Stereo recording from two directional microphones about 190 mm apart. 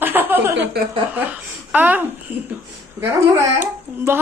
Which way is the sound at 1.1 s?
10° right (ahead or behind).